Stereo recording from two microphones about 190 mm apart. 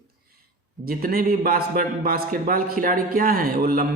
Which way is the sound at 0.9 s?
50° right (ahead or behind).